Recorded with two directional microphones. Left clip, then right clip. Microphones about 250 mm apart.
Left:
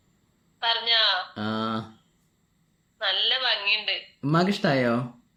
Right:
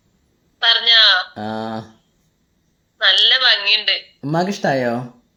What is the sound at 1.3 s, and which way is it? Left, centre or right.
Speech, centre.